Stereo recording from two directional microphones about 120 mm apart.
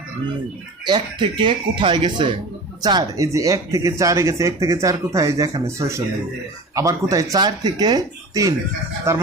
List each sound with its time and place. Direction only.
0.9 s speech: 40° right (ahead or behind); by 9.2 s 20° right (ahead or behind)